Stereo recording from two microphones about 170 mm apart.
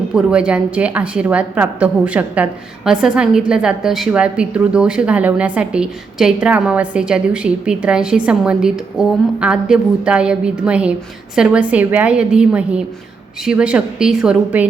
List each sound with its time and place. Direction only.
0.1 s a woman's voice: 5° right (ahead or behind)